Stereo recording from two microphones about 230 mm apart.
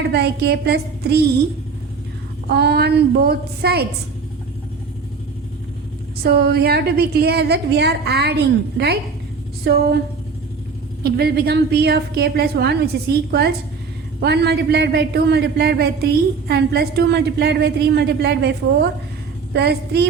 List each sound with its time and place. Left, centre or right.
0.0 s a woman's voice: right
2.5 s a woman's voice: right
6.2 s a woman's voice: right
11.0 s a woman's voice: right